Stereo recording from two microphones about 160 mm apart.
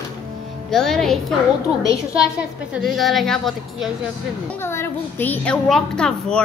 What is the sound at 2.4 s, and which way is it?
A woman's voice, 5° right (ahead or behind).